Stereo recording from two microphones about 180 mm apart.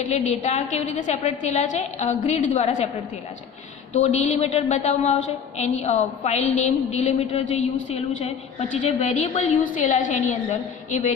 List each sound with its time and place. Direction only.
0.0 s a woman's voice: 40° left (ahead or behind)
3.9 s a woman's voice: 40° left (ahead or behind)